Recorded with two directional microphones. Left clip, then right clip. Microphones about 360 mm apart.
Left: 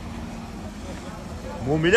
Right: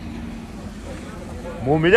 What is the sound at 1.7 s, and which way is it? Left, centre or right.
Speech, centre.